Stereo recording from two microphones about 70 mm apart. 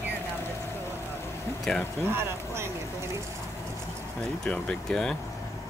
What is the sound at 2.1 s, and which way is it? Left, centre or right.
Speech, right.